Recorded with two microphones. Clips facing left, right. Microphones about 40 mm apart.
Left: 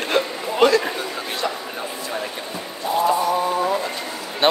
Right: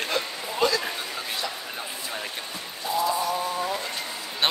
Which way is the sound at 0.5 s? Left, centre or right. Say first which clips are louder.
Left 8 dB; left.